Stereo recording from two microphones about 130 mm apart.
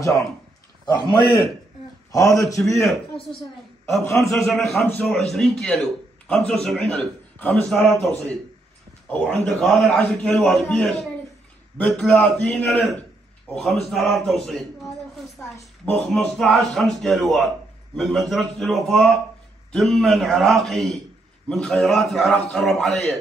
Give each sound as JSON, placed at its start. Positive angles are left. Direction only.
{"t": 0.8, "sound": "a man's voice", "side_deg": 35}
{"t": 2.1, "sound": "a man's voice", "side_deg": 25}
{"t": 2.8, "sound": "a man's voice", "side_deg": 0}
{"t": 4.0, "sound": "a man's voice", "side_deg": 20}
{"t": 5.0, "sound": "a man's voice", "side_deg": 0}